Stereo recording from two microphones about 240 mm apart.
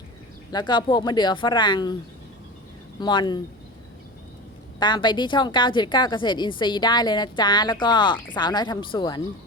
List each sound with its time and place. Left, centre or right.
0.5 s a woman's voice: centre
3.0 s speech: centre
4.8 s a woman's voice: centre